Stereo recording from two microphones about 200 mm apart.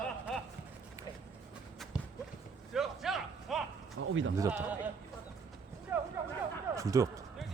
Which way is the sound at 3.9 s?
75° right (ahead or behind).